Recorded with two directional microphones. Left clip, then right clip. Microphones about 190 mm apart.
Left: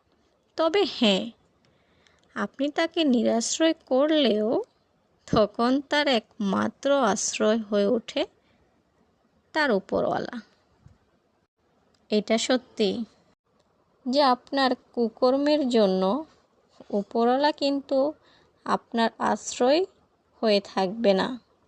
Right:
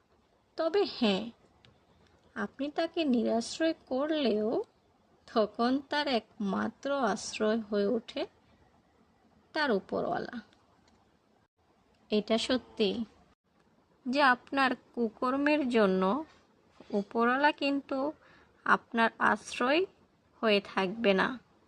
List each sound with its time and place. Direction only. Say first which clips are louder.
0.5 s speech: left 6 dB; 45° left (ahead or behind)
9.5 s a woman's voice: left 6 dB; 40° left (ahead or behind)
12.0 s a woman's voice: left 6 dB; 35° left (ahead or behind)
14.1 s a woman's voice: left 4 dB; centre (ahead or behind)
15.4 s a woman's voice: left 5 dB; 25° left (ahead or behind)
15.8 s a woman's voice: left 5 dB; centre (ahead or behind)
17.1 s a woman's voice: left 4 dB; 25° left (ahead or behind)
17.6 s a woman's voice: left 8 dB; centre (ahead or behind)
18.3 s a woman's voice: even; 30° left (ahead or behind)